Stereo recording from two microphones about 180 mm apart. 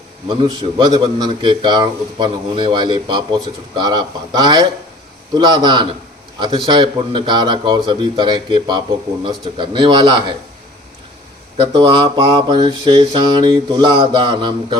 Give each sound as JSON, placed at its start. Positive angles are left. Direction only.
{"t": 0.3, "sound": "a man's voice", "side_deg": -25}
{"t": 11.8, "sound": "a man's voice", "side_deg": -25}